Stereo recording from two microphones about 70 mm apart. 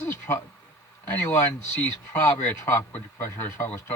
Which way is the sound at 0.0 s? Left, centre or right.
Left.